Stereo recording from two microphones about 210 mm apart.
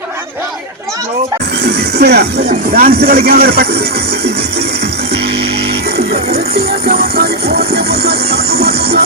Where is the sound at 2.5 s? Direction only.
45° right (ahead or behind).